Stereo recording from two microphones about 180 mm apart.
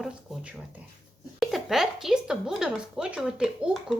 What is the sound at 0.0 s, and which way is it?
A woman's voice, 5° right (ahead or behind).